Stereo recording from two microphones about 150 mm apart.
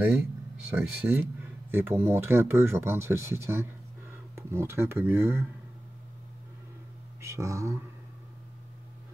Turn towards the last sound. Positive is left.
turn(degrees=-20)  # may be behind; listen again after turning